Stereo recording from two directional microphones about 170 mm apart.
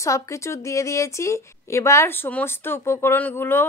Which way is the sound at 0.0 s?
20° left (ahead or behind).